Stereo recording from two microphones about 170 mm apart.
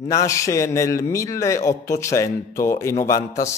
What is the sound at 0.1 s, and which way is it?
A man's voice, 20° left (ahead or behind).